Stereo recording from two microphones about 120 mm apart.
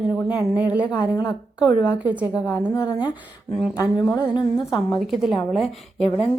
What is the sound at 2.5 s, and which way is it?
Speech, 30° left (ahead or behind).